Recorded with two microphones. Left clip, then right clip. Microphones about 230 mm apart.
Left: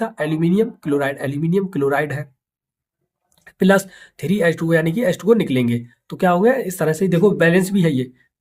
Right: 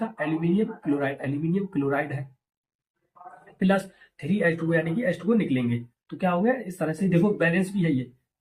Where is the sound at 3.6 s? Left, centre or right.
Left.